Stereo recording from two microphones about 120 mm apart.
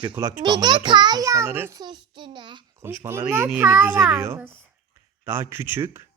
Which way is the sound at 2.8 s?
20° right (ahead or behind).